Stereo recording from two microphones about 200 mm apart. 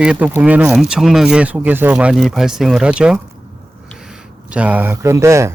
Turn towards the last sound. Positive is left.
turn(degrees=-15)  # may be behind; listen again after turning